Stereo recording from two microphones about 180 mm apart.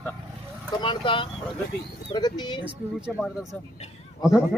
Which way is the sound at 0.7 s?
25° left (ahead or behind).